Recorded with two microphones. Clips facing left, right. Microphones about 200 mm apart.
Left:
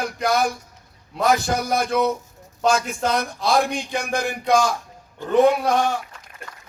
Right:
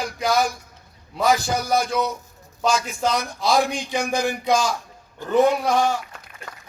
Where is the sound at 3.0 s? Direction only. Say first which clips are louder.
Right 1 dB; 55° left (ahead or behind).